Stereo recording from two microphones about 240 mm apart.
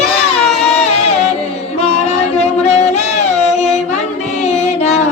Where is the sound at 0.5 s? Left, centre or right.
Left.